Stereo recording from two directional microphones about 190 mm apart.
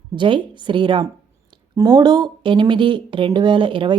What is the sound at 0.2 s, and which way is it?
A woman's voice, 25° right (ahead or behind).